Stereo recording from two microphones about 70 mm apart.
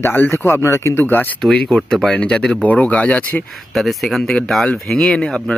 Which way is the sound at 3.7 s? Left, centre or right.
Centre.